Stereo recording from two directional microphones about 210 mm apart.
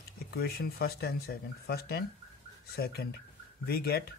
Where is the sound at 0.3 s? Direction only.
45° left (ahead or behind).